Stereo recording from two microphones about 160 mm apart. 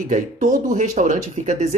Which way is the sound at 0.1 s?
55° right (ahead or behind).